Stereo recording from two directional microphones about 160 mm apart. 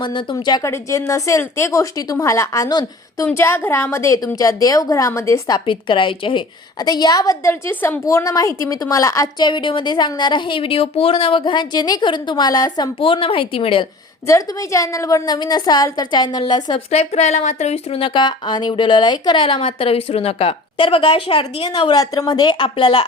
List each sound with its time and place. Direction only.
0.0 s a woman's voice: 30° left (ahead or behind)
5.5 s a woman's voice: 30° left (ahead or behind)
14.3 s a woman's voice: 20° left (ahead or behind)
16.9 s a woman's voice: 40° left (ahead or behind)